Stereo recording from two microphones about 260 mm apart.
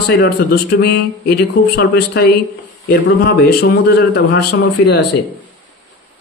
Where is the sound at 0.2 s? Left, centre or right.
Left.